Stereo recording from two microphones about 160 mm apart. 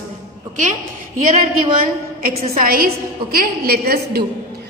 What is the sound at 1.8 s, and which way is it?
A woman's voice, 60° right (ahead or behind).